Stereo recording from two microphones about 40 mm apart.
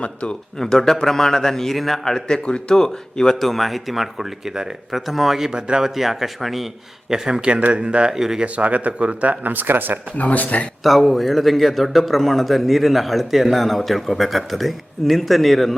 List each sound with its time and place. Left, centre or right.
0.0 s speech: left
0.6 s speech: centre
2.0 s a man's voice: centre
5.5 s speech: right
5.8 s a man's voice: centre
7.1 s speech: centre
7.5 s speech: right
8.1 s speech: centre
8.5 s speech: right
9.4 s speech: right
10.3 s speech: left
10.8 s a man's voice: centre